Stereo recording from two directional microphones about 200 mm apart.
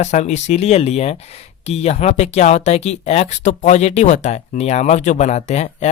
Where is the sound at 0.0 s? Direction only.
35° left (ahead or behind).